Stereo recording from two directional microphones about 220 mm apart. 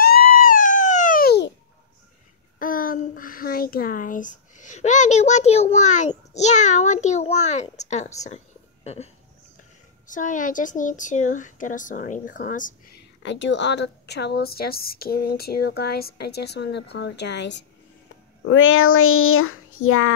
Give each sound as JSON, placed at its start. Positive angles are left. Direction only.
{"t": 0.0, "sound": "a sound", "side_deg": 40}
{"t": 2.6, "sound": "a child's voice", "side_deg": 40}
{"t": 13.2, "sound": "a woman's voice", "side_deg": 55}
{"t": 18.5, "sound": "child singing", "side_deg": 65}